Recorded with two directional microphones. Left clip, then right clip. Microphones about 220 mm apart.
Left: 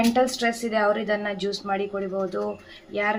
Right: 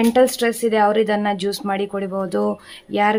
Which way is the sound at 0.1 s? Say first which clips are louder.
Right 6 dB; 50° right (ahead or behind).